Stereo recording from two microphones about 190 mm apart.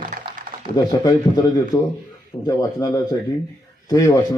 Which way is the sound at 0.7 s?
20° left (ahead or behind).